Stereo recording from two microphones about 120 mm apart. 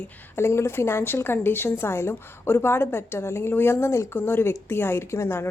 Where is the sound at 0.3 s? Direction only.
20° left (ahead or behind).